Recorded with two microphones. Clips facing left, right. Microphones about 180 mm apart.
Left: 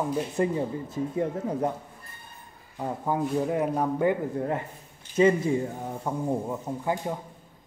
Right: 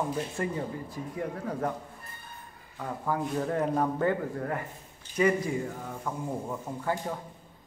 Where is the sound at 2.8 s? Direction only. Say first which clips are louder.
Left 3 dB; 20° left (ahead or behind).